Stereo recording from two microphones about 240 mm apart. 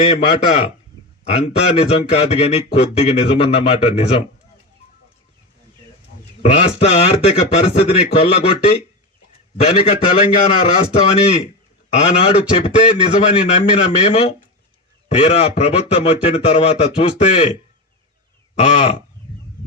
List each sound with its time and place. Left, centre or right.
0.3 s a man's voice: left
6.4 s a man's voice: left
18.6 s a man's voice: left